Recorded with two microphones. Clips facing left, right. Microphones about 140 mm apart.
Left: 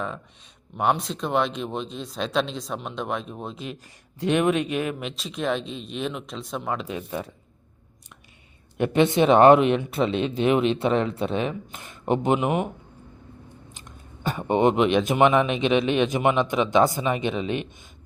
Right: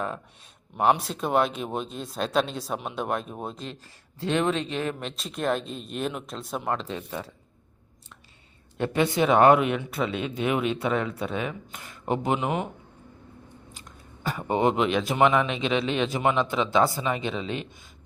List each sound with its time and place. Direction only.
0.8 s speech: 5° right (ahead or behind)
4.2 s speech: 15° left (ahead or behind); by 6.8 s centre (ahead or behind)
6.8 s speech: 15° left (ahead or behind)
8.8 s speech: 20° left (ahead or behind)
13.7 s speech: 20° left (ahead or behind)